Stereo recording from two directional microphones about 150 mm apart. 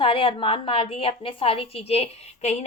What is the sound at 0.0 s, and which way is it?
A woman's voice, 35° left (ahead or behind).